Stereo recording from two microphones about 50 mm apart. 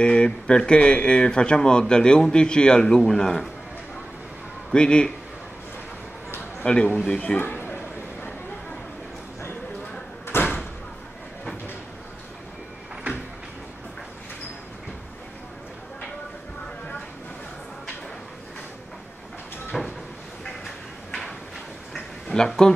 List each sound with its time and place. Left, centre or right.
0.0 s speech: centre
4.6 s a man's voice: centre
6.6 s speech: centre
7.3 s a sound: left
10.3 s door: left
19.7 s a sound: centre
22.3 s speech: centre